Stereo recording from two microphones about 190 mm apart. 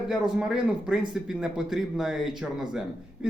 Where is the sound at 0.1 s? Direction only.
5° right (ahead or behind).